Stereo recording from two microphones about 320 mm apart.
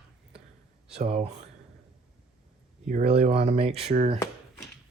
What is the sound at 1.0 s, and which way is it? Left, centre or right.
Speech, centre.